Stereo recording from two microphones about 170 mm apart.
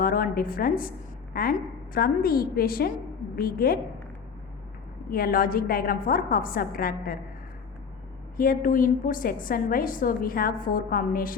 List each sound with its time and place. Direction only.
0.0 s a woman's voice: 55° left (ahead or behind)
5.1 s a woman's voice: 60° left (ahead or behind)
8.4 s a woman's voice: 55° left (ahead or behind)